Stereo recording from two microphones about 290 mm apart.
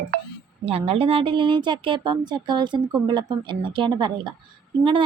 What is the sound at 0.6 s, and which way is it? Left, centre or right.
A woman's voice, centre.